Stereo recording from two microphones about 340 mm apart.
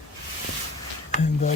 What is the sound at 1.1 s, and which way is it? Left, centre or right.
Speech, left.